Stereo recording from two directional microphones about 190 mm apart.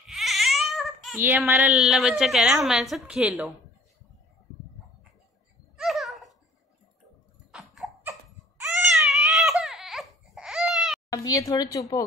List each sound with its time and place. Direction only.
0.1 s baby cry: centre (ahead or behind)
1.1 s a woman's voice: 10° right (ahead or behind)
5.8 s a sound: centre (ahead or behind)
7.5 s a sound: centre (ahead or behind)
8.8 s baby cry: centre (ahead or behind)
11.1 s speech: 20° left (ahead or behind)